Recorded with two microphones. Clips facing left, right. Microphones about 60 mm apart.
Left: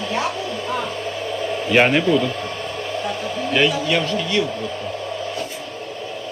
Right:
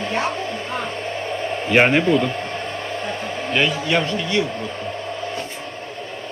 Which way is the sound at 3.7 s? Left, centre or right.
Right.